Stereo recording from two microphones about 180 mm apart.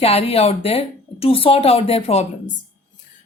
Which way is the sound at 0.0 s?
35° left (ahead or behind).